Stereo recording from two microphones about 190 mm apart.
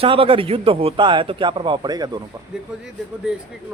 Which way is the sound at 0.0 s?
30° right (ahead or behind).